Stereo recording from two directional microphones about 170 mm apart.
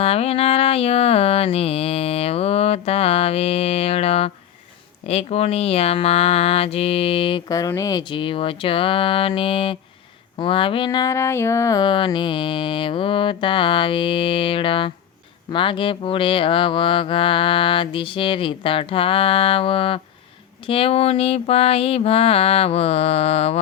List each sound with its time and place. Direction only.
0.0 s speech: 35° left (ahead or behind)
10.3 s a sound: 30° left (ahead or behind)
15.4 s speech: 30° left (ahead or behind)